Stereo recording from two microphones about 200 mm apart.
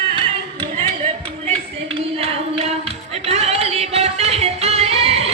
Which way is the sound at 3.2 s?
30° right (ahead or behind).